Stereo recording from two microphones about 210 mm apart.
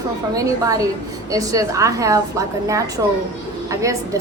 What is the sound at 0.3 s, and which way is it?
A woman's voice, 15° right (ahead or behind).